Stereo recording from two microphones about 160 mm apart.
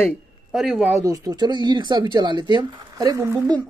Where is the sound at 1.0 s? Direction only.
20° right (ahead or behind).